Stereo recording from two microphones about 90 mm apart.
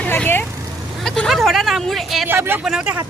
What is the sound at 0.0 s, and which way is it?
Vehicle, 20° left (ahead or behind).